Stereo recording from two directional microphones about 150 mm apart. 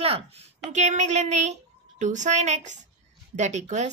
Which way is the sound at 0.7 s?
50° right (ahead or behind).